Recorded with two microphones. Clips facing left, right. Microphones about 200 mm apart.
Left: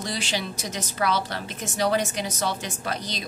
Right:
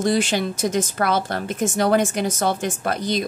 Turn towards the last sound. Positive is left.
turn(degrees=-50)  # may be behind; listen again after turning